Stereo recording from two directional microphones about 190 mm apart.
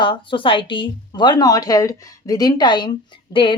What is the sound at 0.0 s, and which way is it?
A woman's voice, 25° left (ahead or behind).